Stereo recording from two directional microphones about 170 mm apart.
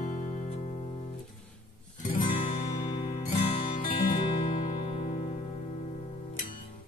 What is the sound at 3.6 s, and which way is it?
Music, 55° left (ahead or behind).